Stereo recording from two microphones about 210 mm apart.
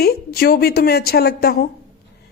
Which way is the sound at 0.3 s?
45° left (ahead or behind).